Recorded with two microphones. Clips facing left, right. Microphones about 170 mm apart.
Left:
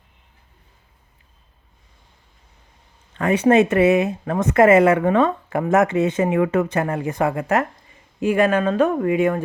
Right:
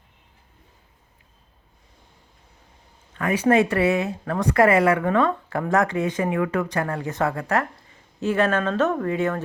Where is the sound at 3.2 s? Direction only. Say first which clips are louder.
Left 4 dB; 25° left (ahead or behind).